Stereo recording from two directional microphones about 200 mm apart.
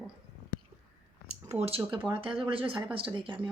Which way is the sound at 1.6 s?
30° right (ahead or behind).